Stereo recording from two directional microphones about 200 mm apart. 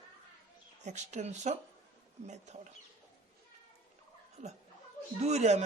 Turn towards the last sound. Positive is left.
turn(degrees=-35)  # may be behind; listen again after turning